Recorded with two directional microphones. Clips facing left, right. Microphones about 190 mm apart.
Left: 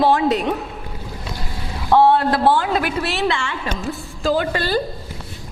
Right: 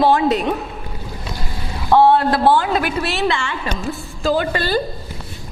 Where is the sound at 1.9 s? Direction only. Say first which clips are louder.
Right 1 dB; 10° right (ahead or behind).